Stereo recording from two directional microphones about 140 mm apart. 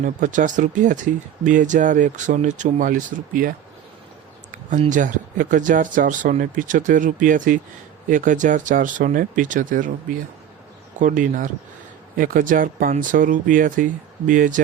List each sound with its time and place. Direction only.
0.0 s speech: 65° right (ahead or behind)
4.9 s speech: 70° right (ahead or behind)
11.0 s speech: 70° right (ahead or behind)